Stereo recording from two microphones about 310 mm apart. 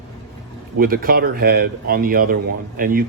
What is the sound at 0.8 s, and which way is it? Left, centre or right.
Speech, right.